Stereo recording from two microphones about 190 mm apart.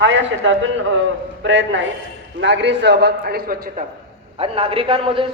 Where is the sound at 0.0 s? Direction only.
75° right (ahead or behind).